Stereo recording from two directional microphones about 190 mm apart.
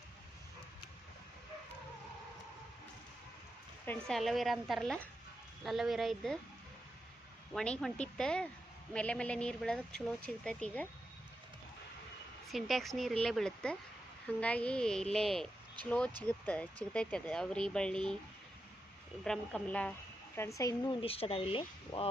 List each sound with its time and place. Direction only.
3.8 s speech: 5° left (ahead or behind)
7.5 s speech: 5° left (ahead or behind)
12.5 s speech: centre (ahead or behind)
19.2 s speech: 5° left (ahead or behind); by 22.0 s 30° left (ahead or behind)